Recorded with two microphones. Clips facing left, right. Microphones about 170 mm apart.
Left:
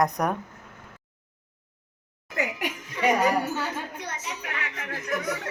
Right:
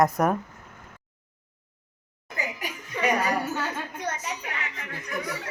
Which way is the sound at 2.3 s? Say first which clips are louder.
Left 4 dB; 75° left (ahead or behind).